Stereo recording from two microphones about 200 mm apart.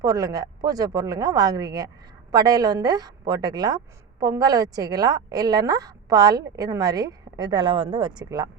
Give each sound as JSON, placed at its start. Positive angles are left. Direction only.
{"t": 0.0, "sound": "a woman's voice", "side_deg": -20}